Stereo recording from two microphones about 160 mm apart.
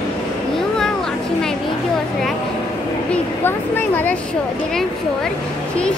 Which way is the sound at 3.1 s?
10° left (ahead or behind).